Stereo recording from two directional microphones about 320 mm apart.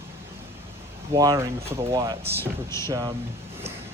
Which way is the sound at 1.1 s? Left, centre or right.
Centre.